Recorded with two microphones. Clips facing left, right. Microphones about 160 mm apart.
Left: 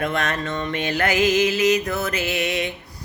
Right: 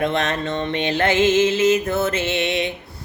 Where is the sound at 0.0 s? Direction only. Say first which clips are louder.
Right 3 dB; 25° right (ahead or behind).